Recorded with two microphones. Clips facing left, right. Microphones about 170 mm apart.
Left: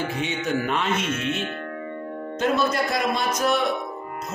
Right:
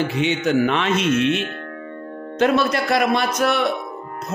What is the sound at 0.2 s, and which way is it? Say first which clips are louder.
A man's voice: right 9 dB; 80° right.